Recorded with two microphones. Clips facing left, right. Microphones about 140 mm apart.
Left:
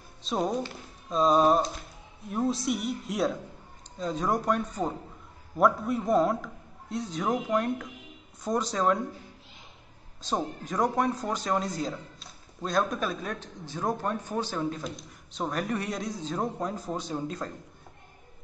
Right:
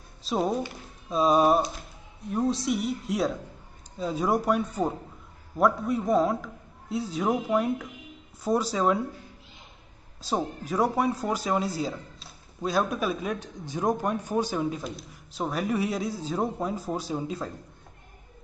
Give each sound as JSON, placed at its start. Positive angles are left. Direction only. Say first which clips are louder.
{"t": 0.2, "sound": "a man's voice", "louder": "right 2 dB", "side_deg": -5}
{"t": 10.2, "sound": "speech", "louder": "right 2 dB", "side_deg": -5}